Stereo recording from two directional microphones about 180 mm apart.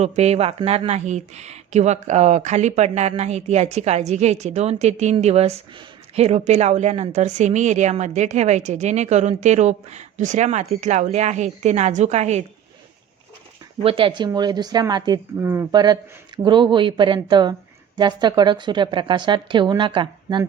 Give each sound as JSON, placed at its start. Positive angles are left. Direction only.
{"t": 0.0, "sound": "a woman's voice", "side_deg": -35}
{"t": 13.8, "sound": "speech", "side_deg": -30}